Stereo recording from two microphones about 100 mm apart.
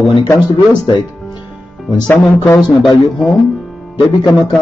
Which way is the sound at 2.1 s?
20° left (ahead or behind).